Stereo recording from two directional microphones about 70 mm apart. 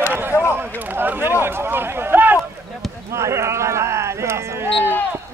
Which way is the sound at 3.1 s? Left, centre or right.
Right.